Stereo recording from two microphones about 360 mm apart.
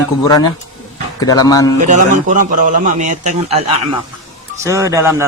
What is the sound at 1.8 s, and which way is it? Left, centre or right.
A man's voice, right.